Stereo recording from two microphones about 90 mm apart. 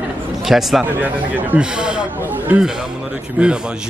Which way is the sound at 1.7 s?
10° right (ahead or behind).